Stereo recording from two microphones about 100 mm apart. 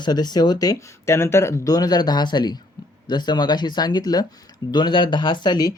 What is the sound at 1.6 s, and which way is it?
Speech, 40° left (ahead or behind).